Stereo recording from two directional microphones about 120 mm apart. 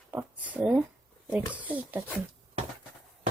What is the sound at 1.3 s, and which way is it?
Speech, 15° right (ahead or behind).